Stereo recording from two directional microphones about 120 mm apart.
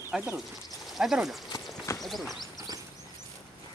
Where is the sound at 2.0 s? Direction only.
Centre (ahead or behind).